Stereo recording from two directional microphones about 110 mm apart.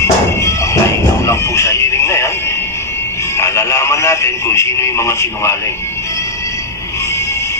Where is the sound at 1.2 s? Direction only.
25° left (ahead or behind).